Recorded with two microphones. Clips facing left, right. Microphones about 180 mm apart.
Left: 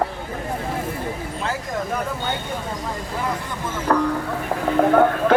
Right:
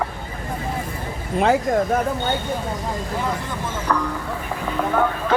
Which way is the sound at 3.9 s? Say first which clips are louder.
Left 4 dB; 45° left (ahead or behind).